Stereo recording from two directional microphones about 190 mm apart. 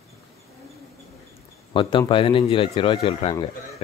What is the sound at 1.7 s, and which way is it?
Speech, 25° left (ahead or behind).